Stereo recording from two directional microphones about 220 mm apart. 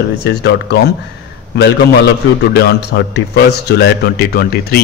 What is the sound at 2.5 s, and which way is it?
Speech, 50° left (ahead or behind).